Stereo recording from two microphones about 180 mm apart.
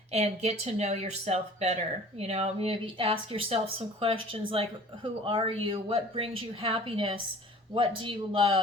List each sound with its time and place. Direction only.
0.1 s speech: 35° right (ahead or behind)